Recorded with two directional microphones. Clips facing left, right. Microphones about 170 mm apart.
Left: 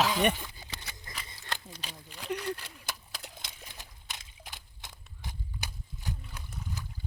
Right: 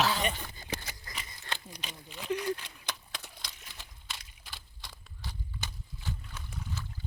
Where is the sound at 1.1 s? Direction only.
25° left (ahead or behind).